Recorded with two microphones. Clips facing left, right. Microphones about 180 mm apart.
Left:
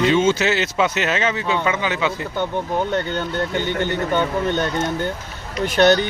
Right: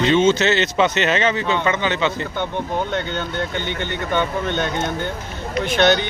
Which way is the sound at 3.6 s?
40° left (ahead or behind).